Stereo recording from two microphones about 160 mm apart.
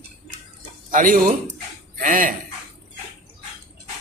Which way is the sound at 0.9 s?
55° right (ahead or behind).